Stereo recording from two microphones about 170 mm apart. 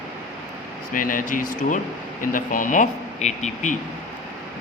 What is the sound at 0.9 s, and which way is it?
Speech, 55° left (ahead or behind).